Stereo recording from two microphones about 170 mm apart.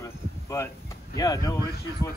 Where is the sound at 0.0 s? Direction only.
15° left (ahead or behind).